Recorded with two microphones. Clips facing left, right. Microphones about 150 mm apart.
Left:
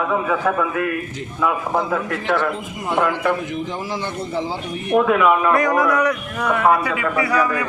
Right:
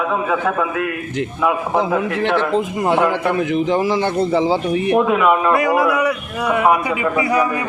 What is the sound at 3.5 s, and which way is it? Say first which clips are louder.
Speech: right 9 dB; 85° right.